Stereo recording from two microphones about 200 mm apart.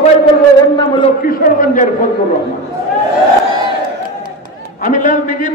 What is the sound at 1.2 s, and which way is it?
Speech, 45° left (ahead or behind).